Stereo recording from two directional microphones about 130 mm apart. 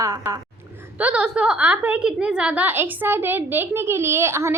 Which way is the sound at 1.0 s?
10° right (ahead or behind).